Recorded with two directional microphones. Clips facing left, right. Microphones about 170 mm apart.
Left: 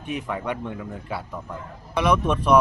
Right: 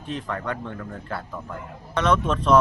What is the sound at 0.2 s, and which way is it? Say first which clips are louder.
Speech: left 1 dB; 10° left (ahead or behind).